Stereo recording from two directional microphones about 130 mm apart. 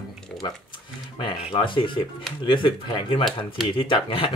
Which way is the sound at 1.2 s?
35° left (ahead or behind).